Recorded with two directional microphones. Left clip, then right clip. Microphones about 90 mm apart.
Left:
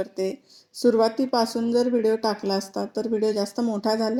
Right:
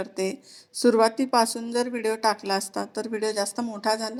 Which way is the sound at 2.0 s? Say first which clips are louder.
Left 1 dB; 10° left (ahead or behind).